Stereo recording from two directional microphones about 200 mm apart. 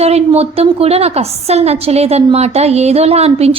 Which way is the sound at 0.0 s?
30° right (ahead or behind).